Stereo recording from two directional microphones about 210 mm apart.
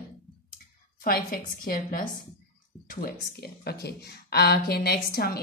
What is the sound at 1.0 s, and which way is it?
A woman's voice, 45° left (ahead or behind).